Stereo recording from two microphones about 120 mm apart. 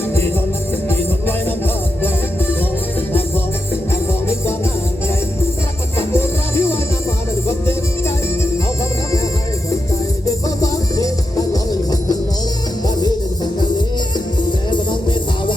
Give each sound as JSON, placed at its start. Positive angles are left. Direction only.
{"t": 0.9, "sound": "music", "side_deg": 15}
{"t": 6.0, "sound": "music", "side_deg": 20}
{"t": 10.6, "sound": "music", "side_deg": 30}